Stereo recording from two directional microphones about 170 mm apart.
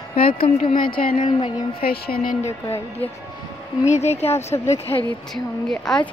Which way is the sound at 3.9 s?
40° left (ahead or behind).